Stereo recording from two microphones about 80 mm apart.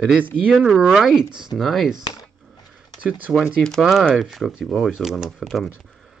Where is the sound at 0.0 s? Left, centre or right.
Centre.